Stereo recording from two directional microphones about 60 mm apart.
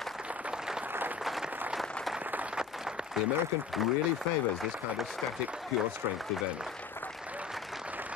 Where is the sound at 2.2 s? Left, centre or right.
Right.